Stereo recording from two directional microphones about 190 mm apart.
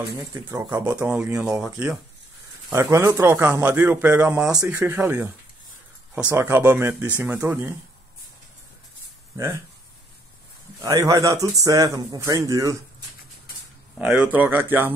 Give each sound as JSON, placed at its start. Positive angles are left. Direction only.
{"t": 0.2, "sound": "speech", "side_deg": -15}
{"t": 2.7, "sound": "speech", "side_deg": -15}
{"t": 10.8, "sound": "speech", "side_deg": -20}
{"t": 13.9, "sound": "speech", "side_deg": -5}